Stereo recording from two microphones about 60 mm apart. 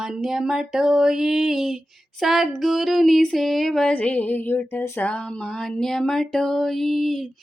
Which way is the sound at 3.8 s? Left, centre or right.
Left.